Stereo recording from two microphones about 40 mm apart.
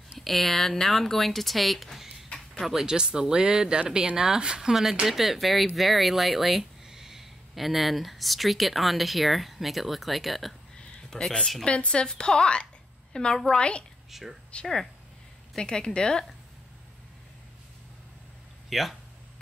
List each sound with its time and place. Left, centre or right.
0.2 s speech: centre
2.6 s speech: centre
10.8 s a sound: centre
11.6 s a woman's voice: left
14.1 s speech: centre
14.5 s speech: left
18.7 s speech: centre